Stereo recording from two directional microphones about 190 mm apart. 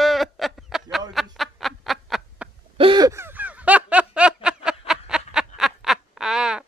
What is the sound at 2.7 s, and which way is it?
Snicker, 25° right (ahead or behind).